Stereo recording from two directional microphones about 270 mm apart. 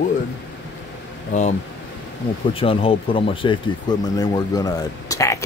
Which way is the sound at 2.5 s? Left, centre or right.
Centre.